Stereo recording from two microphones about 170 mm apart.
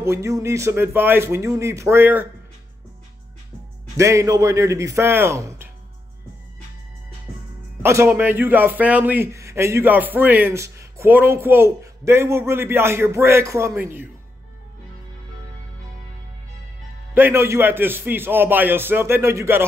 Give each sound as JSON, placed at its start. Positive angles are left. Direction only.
{"t": 0.0, "sound": "a man's voice", "side_deg": -15}
{"t": 3.9, "sound": "a man's voice", "side_deg": -15}
{"t": 7.8, "sound": "a man's voice", "side_deg": -15}
{"t": 17.1, "sound": "a man's voice", "side_deg": -15}